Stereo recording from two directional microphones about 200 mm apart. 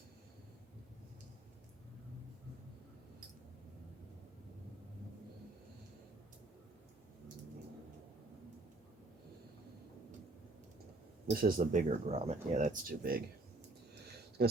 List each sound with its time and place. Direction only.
11.3 s speech: 45° right (ahead or behind)